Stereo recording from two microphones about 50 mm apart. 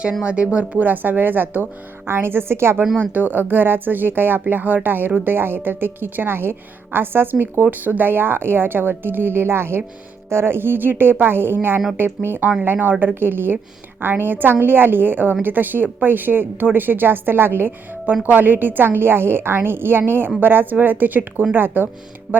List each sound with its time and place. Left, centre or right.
0.0 s a woman's voice: right
3.0 s a woman's voice: right
22.3 s music: right